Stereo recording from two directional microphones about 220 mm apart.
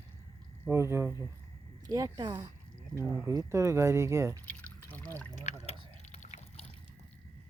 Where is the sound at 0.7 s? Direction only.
10° right (ahead or behind).